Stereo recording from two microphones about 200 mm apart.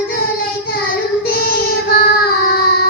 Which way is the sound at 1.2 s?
45° left (ahead or behind).